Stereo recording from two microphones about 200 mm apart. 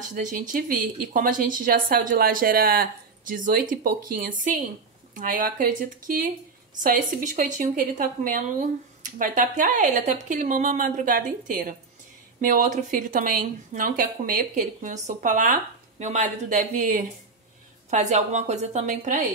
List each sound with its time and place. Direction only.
0.1 s a woman's voice: 40° right (ahead or behind)